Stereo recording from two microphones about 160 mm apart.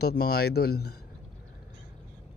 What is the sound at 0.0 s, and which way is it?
Speech, 75° left (ahead or behind).